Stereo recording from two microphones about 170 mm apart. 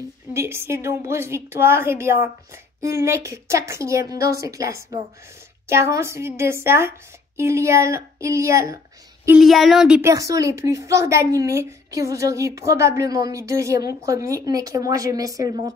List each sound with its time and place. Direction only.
0.3 s a woman's voice: 15° right (ahead or behind)
9.4 s speech: centre (ahead or behind)
10.0 s a woman's voice: 20° right (ahead or behind)